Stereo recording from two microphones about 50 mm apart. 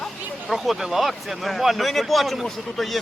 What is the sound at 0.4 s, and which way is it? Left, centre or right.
Speech, centre.